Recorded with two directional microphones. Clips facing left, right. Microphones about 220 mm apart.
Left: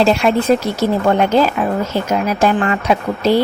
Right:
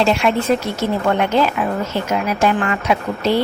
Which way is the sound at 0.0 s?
40° left (ahead or behind).